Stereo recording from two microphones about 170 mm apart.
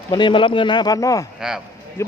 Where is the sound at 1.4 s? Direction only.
5° right (ahead or behind).